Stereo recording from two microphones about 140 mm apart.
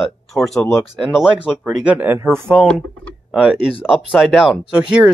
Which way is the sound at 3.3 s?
5° right (ahead or behind).